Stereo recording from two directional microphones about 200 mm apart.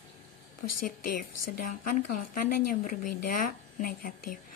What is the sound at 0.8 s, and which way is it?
Speech, 45° left (ahead or behind).